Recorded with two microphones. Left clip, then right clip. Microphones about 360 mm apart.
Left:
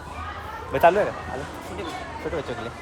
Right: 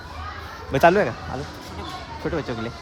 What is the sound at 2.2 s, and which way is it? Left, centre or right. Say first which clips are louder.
Speech: right 3 dB; right.